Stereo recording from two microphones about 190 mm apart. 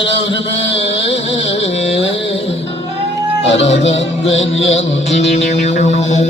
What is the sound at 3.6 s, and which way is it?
Music, 35° left (ahead or behind).